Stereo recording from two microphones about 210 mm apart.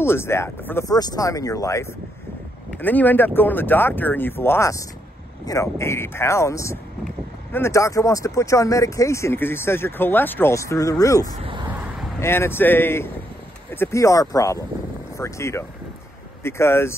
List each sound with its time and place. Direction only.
0.0 s speech: 10° left (ahead or behind)
11.4 s a sound: 20° right (ahead or behind)
12.2 s speech: 10° left (ahead or behind)